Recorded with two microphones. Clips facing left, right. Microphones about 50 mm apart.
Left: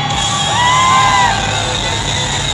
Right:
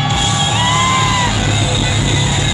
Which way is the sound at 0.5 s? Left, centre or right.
Left.